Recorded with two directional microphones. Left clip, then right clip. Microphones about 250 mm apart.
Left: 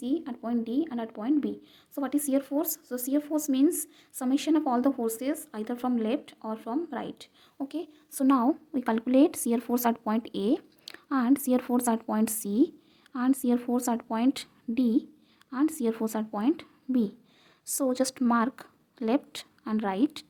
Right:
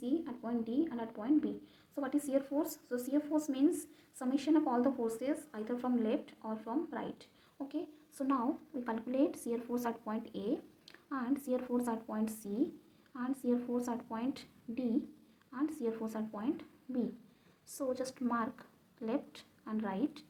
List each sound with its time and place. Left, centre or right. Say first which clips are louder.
0.0 s a woman's voice: left 6 dB; left